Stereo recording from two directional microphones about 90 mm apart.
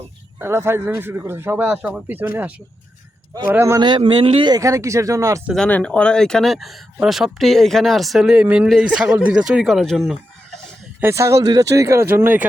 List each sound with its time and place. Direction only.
0.3 s speech: 25° right (ahead or behind)
1.6 s a man's voice: 15° right (ahead or behind)
3.8 s a man's voice: 55° right (ahead or behind); by 4.4 s 80° right
4.4 s speech: 40° right (ahead or behind)
5.5 s a man's voice: 10° left (ahead or behind)
11.0 s speech: 30° right (ahead or behind)